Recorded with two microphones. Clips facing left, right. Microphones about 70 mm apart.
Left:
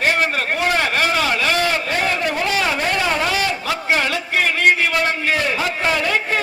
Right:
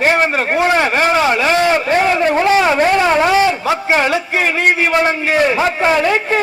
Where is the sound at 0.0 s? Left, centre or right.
Right.